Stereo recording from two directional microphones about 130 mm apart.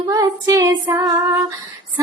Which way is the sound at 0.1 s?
25° right (ahead or behind).